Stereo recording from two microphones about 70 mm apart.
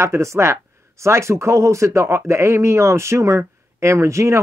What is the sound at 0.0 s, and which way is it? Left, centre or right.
Speech, right.